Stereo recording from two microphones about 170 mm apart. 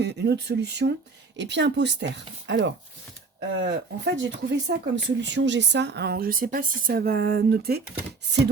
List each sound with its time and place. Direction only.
0.0 s speech: 85° right; by 7.8 s 70° right (ahead or behind)